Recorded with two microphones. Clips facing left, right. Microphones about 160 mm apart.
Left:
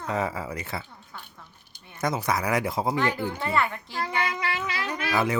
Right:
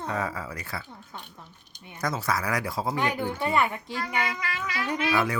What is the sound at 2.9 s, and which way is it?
A child's voice, 15° right (ahead or behind).